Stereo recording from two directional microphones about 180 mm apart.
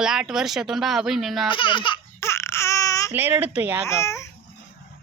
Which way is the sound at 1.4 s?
30° left (ahead or behind).